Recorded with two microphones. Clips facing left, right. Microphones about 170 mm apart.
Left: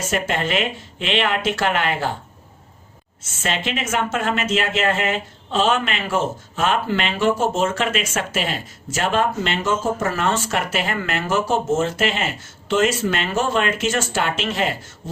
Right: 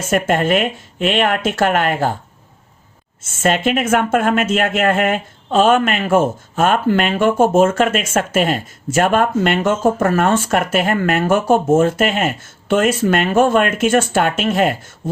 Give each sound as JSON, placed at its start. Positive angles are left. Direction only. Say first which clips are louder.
{"t": 0.1, "sound": "speech", "louder": "right 8 dB", "side_deg": -50}
{"t": 3.2, "sound": "speech", "louder": "right 9 dB", "side_deg": -50}